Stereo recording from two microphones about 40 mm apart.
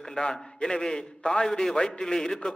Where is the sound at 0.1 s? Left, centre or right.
Centre.